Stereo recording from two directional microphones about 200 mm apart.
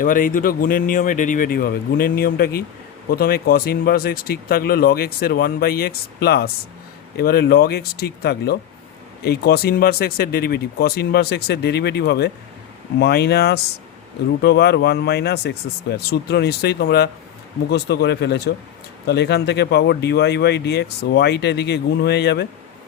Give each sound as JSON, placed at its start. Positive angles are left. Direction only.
{"t": 0.0, "sound": "speech", "side_deg": 45}